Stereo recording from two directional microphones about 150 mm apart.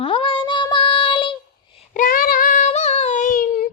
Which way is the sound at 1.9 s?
65° left (ahead or behind).